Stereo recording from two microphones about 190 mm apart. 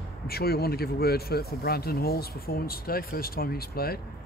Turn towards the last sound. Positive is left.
turn(degrees=55)  # may be behind; listen again after turning